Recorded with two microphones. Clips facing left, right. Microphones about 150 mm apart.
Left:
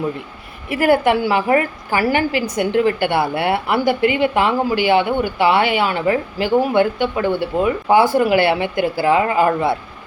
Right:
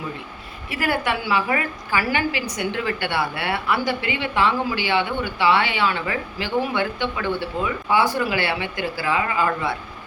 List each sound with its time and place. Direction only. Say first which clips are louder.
0.7 s speech: left 9 dB; 50° left (ahead or behind)
9.5 s speech: left 7 dB; 30° left (ahead or behind)